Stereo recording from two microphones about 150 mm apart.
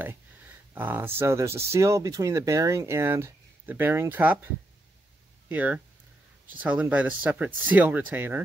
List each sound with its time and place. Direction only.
0.0 s speech: 10° right (ahead or behind)
5.5 s speech: 10° right (ahead or behind)